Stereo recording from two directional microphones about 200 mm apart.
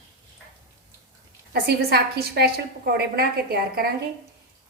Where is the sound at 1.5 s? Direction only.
55° right (ahead or behind).